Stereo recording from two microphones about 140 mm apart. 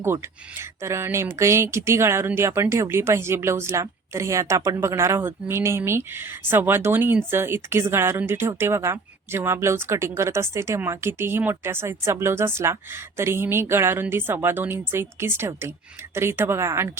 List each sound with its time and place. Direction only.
0.6 s speech: 20° right (ahead or behind)